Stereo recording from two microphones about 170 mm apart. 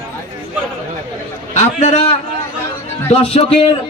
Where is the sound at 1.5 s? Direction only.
40° left (ahead or behind).